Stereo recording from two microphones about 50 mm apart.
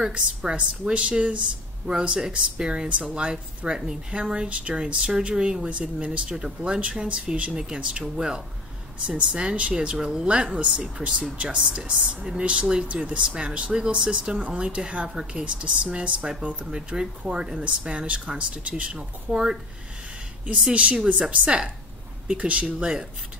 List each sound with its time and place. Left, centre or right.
0.0 s speech: centre
20.7 s speech: right